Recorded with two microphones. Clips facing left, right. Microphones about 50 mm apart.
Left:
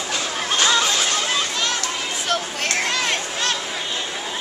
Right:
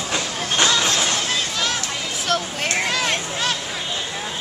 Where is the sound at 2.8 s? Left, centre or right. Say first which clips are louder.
Right 1 dB; centre.